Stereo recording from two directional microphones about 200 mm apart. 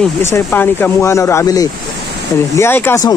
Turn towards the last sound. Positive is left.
turn(degrees=15)  # may be behind; listen again after turning